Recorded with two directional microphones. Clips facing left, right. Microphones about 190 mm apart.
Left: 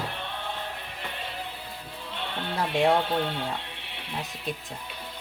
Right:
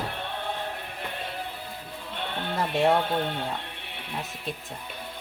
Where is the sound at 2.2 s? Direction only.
50° right (ahead or behind).